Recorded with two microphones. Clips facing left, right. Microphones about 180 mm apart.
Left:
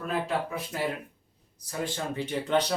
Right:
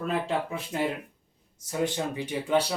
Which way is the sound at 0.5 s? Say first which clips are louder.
Right 2 dB; 25° right (ahead or behind).